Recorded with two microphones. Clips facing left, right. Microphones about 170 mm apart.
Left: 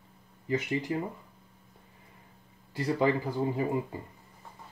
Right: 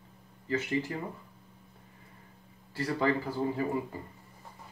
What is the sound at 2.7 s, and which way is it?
Speech, 15° left (ahead or behind).